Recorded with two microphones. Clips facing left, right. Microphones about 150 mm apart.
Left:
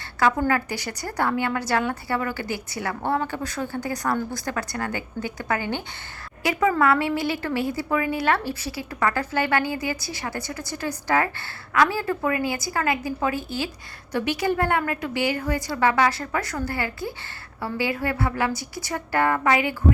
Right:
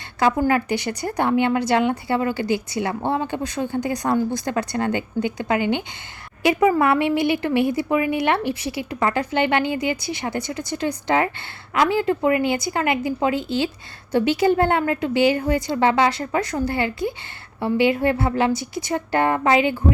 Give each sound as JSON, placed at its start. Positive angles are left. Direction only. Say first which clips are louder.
{"t": 0.4, "sound": "a woman's voice", "louder": "right 4 dB", "side_deg": -20}